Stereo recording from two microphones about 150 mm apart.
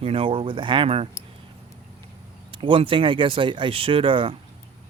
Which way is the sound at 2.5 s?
35° right (ahead or behind).